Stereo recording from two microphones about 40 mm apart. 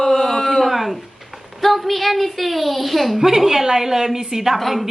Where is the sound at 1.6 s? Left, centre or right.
Centre.